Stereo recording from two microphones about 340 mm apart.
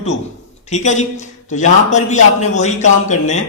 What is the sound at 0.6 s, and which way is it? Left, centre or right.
A man's voice, left.